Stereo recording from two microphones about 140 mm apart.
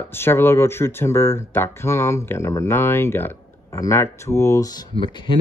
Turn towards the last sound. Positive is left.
turn(degrees=35)  # may be behind; listen again after turning